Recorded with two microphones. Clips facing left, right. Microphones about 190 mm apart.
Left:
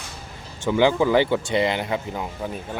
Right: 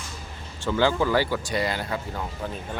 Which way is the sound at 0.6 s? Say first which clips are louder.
Left 4 dB; 15° left (ahead or behind).